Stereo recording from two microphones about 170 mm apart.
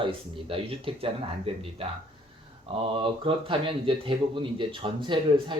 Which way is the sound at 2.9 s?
30° right (ahead or behind).